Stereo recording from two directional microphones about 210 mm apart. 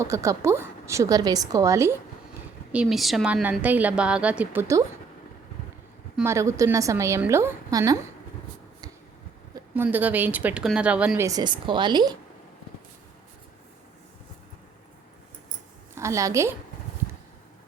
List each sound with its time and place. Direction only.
0.0 s a woman's voice: 15° right (ahead or behind)
2.7 s a woman's voice: centre (ahead or behind)
6.1 s a woman's voice: 15° right (ahead or behind)
9.6 s a woman's voice: 10° right (ahead or behind)
11.3 s a woman's voice: 20° right (ahead or behind)
16.0 s a woman's voice: 15° right (ahead or behind)